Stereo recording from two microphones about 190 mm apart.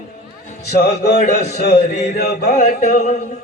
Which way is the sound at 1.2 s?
40° left (ahead or behind).